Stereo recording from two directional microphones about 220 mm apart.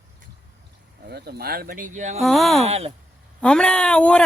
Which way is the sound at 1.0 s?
45° right (ahead or behind).